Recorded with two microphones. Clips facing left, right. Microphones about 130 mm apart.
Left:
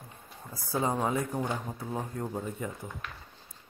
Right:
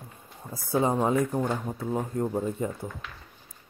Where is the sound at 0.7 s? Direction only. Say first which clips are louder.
Right 5 dB; 25° right (ahead or behind).